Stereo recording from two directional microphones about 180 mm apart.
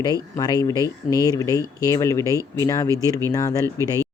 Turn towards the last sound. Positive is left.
turn(degrees=-20)  # may be behind; listen again after turning